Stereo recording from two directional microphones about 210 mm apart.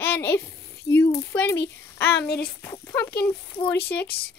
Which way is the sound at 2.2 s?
50° left (ahead or behind).